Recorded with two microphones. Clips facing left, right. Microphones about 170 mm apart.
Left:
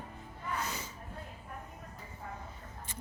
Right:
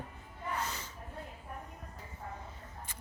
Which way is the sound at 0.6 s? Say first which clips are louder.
Left 1 dB; 10° left (ahead or behind).